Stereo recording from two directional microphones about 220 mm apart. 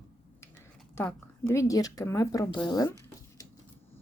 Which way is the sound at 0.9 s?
10° left (ahead or behind).